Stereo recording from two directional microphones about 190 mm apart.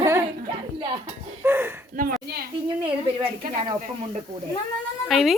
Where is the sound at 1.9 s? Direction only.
45° right (ahead or behind).